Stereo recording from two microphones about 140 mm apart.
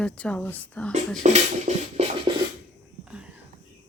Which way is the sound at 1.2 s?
55° right (ahead or behind).